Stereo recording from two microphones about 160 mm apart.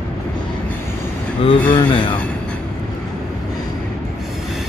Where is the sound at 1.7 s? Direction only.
30° left (ahead or behind).